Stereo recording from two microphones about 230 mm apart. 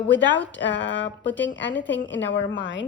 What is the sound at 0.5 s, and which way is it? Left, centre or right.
Speech, left.